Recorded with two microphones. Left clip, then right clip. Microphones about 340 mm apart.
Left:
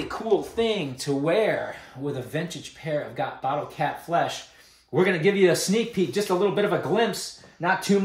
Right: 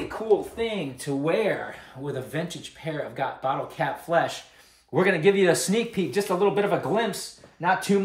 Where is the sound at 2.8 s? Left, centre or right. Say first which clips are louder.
Left 2 dB; centre.